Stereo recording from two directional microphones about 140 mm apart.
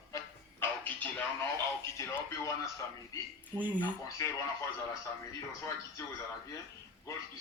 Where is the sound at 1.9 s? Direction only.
20° left (ahead or behind).